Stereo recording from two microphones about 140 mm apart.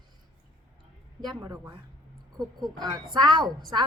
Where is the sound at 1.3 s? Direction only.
30° right (ahead or behind).